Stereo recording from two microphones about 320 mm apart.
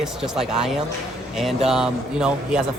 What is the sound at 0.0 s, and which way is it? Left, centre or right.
A man's voice, centre.